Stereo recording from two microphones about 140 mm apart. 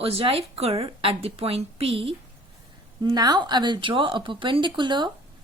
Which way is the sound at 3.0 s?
30° right (ahead or behind).